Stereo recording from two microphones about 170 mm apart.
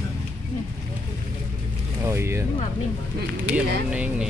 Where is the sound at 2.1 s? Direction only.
15° right (ahead or behind).